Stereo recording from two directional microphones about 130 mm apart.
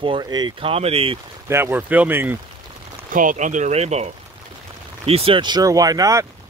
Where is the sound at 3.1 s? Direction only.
80° right; by 4.1 s 55° right (ahead or behind).